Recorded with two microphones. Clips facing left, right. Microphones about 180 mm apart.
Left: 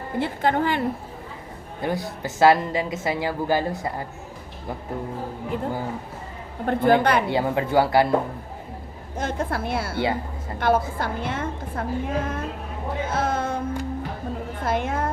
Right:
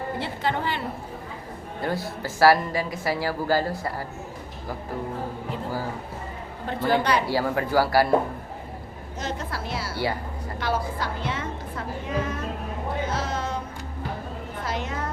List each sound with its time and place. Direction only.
0.2 s a woman's voice: 50° left (ahead or behind)
1.8 s speech: 20° left (ahead or behind)
6.7 s a woman's voice: 55° left (ahead or behind)
7.3 s speech: 20° left (ahead or behind)
9.1 s a woman's voice: 50° left (ahead or behind)
13.1 s music: 50° left (ahead or behind)
14.6 s a sound: 50° left (ahead or behind)